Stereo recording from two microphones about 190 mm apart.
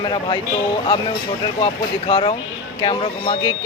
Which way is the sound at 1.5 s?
25° left (ahead or behind).